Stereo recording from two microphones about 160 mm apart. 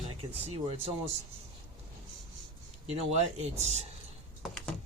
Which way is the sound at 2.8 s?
45° right (ahead or behind).